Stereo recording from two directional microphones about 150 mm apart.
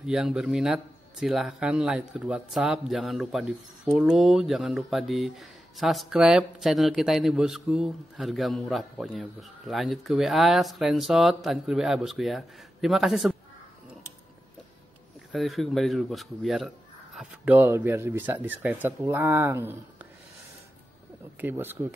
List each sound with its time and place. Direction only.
0.0 s speech: 5° right (ahead or behind)
15.3 s speech: centre (ahead or behind)
21.4 s speech: 15° right (ahead or behind)